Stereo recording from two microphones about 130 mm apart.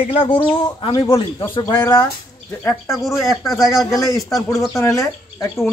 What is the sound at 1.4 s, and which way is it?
Speech, 20° left (ahead or behind).